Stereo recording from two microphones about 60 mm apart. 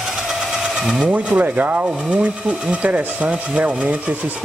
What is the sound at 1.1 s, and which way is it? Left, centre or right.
Speech, right.